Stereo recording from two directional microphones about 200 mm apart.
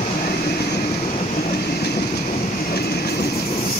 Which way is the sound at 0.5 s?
45° left (ahead or behind).